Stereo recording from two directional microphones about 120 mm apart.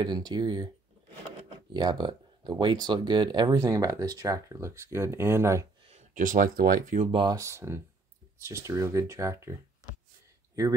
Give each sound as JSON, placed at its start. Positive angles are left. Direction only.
{"t": 0.0, "sound": "speech", "side_deg": -35}
{"t": 1.7, "sound": "speech", "side_deg": -35}
{"t": 5.9, "sound": "speech", "side_deg": -80}
{"t": 7.1, "sound": "speech", "side_deg": -45}
{"t": 7.3, "sound": "speech", "side_deg": -25}